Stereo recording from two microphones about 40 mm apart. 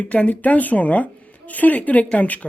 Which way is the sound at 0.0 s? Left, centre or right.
Left.